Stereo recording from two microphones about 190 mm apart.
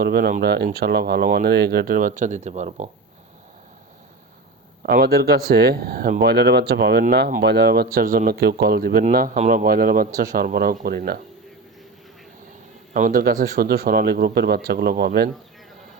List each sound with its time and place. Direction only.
0.0 s speech: 50° right (ahead or behind)
4.8 s speech: 50° right (ahead or behind)
12.9 s speech: 45° right (ahead or behind)